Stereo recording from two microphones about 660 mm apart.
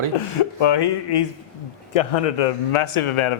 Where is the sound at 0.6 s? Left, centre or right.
Left.